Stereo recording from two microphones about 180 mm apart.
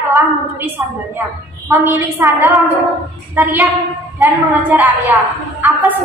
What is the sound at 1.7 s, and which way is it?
A woman's voice, 15° right (ahead or behind).